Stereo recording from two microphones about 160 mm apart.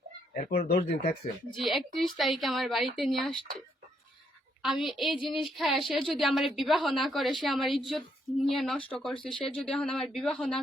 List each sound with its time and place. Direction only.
0.3 s speech: 60° left (ahead or behind)
1.5 s a woman's voice: centre (ahead or behind)
4.6 s a woman's voice: centre (ahead or behind)